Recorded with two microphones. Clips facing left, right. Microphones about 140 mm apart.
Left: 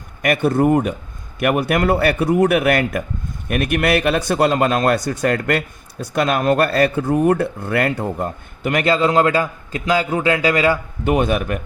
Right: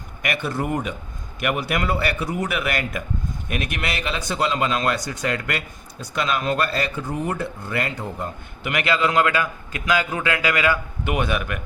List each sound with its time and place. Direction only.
0.2 s a man's voice: 50° left (ahead or behind)